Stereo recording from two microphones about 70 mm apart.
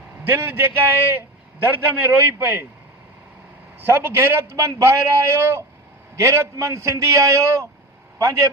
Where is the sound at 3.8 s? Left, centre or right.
Right.